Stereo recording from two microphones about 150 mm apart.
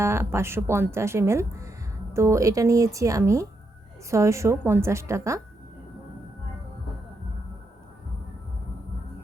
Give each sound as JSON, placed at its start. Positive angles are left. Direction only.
{"t": 0.0, "sound": "speech", "side_deg": -15}